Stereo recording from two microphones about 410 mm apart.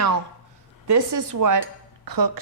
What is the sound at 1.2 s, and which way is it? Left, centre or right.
Dishes, right.